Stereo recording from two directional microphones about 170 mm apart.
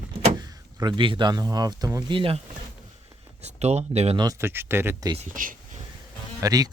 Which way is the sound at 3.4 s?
40° right (ahead or behind).